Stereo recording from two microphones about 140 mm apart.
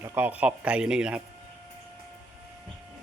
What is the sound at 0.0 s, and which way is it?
A man's voice, 15° right (ahead or behind).